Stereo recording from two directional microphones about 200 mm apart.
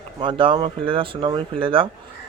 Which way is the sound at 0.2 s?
25° right (ahead or behind).